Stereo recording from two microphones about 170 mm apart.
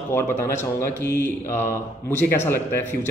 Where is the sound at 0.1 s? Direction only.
15° left (ahead or behind).